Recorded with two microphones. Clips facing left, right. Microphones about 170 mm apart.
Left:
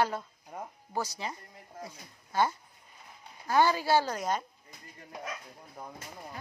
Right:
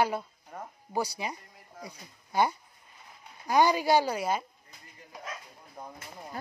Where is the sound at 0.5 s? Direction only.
15° left (ahead or behind).